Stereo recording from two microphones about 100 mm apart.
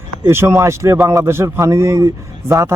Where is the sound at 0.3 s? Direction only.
25° right (ahead or behind).